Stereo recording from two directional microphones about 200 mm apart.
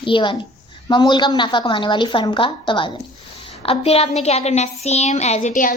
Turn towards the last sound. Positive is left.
turn(degrees=40)  # may be behind; listen again after turning